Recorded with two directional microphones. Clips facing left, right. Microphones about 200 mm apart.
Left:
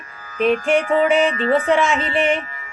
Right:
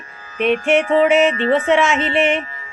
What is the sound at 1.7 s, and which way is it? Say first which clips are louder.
Music: right 2 dB; centre (ahead or behind).